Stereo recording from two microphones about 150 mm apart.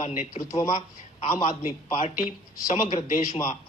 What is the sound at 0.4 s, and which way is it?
Speech, 45° left (ahead or behind).